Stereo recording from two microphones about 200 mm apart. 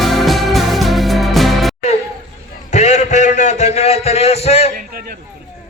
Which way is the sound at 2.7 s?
35° left (ahead or behind).